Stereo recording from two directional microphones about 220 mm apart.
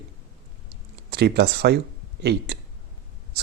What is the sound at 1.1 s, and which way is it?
Speech, 45° right (ahead or behind).